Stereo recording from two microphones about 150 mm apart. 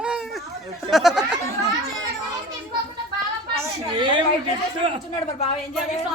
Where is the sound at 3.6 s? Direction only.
25° right (ahead or behind).